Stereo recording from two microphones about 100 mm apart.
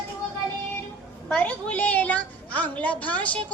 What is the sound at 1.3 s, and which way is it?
A woman's voice, 15° left (ahead or behind).